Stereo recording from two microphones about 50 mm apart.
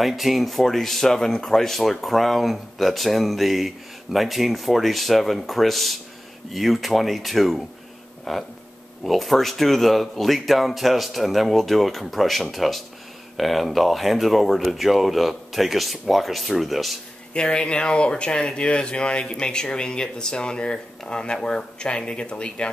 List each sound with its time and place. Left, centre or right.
0.0 s speech: centre
17.3 s speech: centre